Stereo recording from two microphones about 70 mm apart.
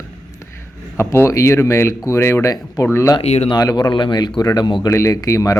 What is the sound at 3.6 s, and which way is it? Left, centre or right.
Speech, left.